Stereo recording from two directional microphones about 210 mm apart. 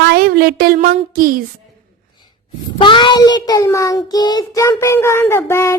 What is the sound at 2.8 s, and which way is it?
Child singing, 20° left (ahead or behind).